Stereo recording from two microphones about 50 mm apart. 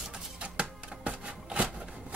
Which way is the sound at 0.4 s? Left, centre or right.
Right.